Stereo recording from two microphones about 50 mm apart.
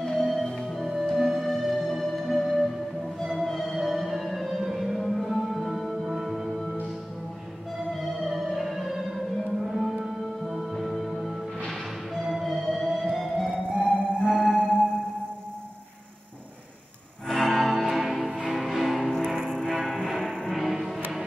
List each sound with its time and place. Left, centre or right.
0.0 s music: centre
7.9 s music: centre
13.7 s music: left
17.3 s music: centre
19.3 s music: centre
20.1 s music: centre